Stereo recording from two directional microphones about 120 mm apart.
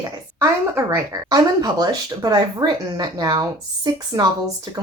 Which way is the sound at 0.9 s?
30° right (ahead or behind).